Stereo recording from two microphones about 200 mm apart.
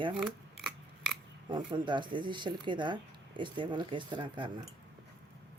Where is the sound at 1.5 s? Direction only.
20° right (ahead or behind).